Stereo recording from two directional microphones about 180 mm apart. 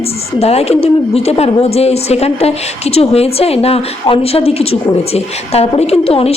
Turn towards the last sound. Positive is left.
turn(degrees=35)  # may be behind; listen again after turning